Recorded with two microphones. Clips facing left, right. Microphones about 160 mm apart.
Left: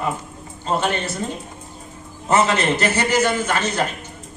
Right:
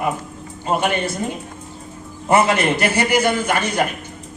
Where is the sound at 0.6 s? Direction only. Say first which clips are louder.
Right 2 dB; 15° right (ahead or behind).